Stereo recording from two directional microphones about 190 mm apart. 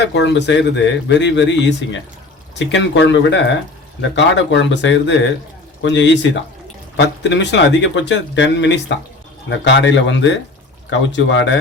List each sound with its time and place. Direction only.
0.0 s speech: 65° left (ahead or behind)